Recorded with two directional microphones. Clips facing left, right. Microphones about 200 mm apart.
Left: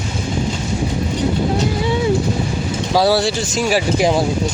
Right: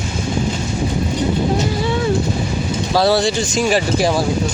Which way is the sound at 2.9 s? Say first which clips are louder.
Even; 10° left (ahead or behind).